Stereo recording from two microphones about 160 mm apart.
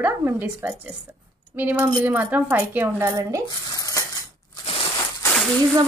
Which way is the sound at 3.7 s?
20° left (ahead or behind).